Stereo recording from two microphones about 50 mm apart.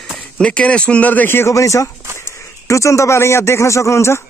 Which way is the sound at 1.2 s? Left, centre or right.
Left.